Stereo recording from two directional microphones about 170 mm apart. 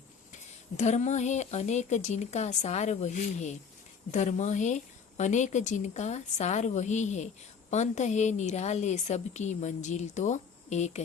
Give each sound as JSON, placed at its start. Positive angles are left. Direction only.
{"t": 0.8, "sound": "a woman's voice", "side_deg": 45}